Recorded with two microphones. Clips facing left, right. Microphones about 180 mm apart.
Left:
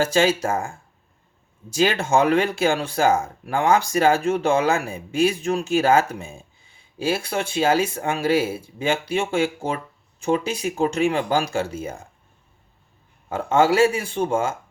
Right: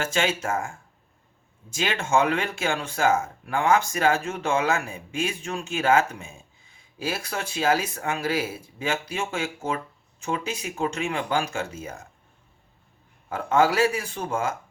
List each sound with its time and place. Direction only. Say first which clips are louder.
0.0 s speech: left 7 dB; 35° left (ahead or behind)
1.7 s speech: left 5 dB; 35° left (ahead or behind)
13.2 s speech: left 3 dB; 25° left (ahead or behind)